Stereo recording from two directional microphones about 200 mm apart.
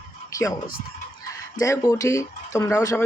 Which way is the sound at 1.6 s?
15° left (ahead or behind).